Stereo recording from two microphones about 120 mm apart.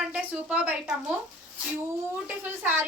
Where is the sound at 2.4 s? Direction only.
15° right (ahead or behind).